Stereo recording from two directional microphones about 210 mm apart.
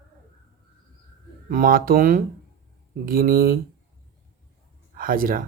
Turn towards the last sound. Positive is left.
turn(degrees=-45)  # may be behind; listen again after turning